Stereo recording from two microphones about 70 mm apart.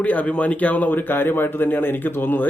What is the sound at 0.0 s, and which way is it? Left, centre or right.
A man's voice, left.